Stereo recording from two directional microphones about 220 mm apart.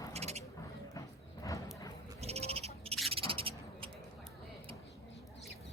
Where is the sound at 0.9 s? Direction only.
15° left (ahead or behind).